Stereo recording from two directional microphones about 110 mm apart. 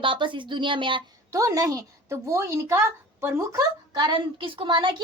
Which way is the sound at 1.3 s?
30° right (ahead or behind).